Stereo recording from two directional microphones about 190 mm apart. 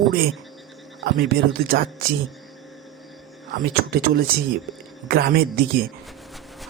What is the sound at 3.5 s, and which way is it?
Speech, 55° right (ahead or behind).